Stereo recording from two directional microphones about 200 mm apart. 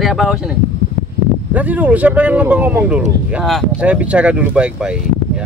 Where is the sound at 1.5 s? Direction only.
10° right (ahead or behind).